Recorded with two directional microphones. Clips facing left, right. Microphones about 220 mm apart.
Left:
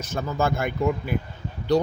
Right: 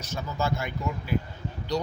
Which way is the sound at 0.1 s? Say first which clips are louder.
Left 5 dB; 55° left (ahead or behind).